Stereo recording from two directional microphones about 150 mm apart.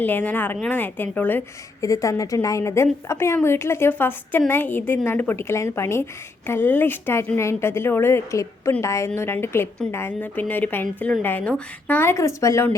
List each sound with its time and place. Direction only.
0.0 s a woman's voice: 10° left (ahead or behind)